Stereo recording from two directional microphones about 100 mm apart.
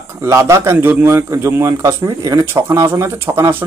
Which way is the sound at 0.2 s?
30° right (ahead or behind).